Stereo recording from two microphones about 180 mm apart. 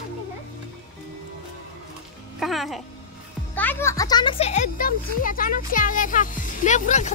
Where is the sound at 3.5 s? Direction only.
10° left (ahead or behind); by 7.1 s 40° left (ahead or behind).